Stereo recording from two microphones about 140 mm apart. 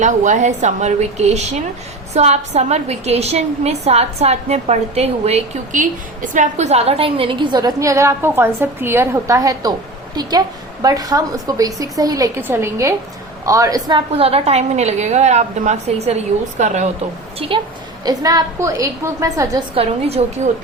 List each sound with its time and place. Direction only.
0.0 s a woman's voice: 60° right (ahead or behind)
5.7 s a woman's voice: 70° right (ahead or behind); by 12.3 s 25° right (ahead or behind)
12.4 s a woman's voice: 15° right (ahead or behind)
14.1 s a woman's voice: 45° right (ahead or behind)
17.4 s a woman's voice: 40° right (ahead or behind)
18.0 s a woman's voice: 25° right (ahead or behind)
19.7 s a woman's voice: 45° right (ahead or behind)